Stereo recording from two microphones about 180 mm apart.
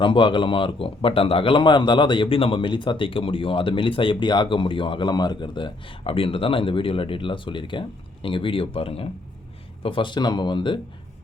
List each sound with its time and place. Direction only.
0.0 s speech: 25° left (ahead or behind)